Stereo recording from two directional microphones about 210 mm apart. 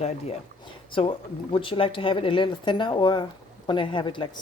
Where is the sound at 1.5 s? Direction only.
25° left (ahead or behind).